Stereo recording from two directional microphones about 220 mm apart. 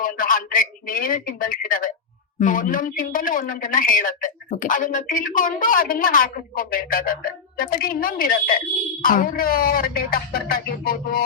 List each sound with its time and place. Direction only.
0.0 s speech: 40° left (ahead or behind)